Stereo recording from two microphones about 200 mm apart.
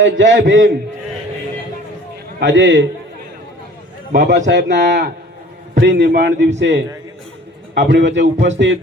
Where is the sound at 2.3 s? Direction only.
65° right (ahead or behind).